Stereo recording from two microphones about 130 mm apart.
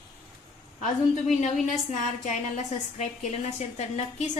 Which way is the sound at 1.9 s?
60° left (ahead or behind).